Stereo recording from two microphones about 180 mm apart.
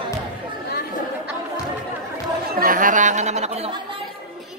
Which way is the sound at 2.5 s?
50° right (ahead or behind).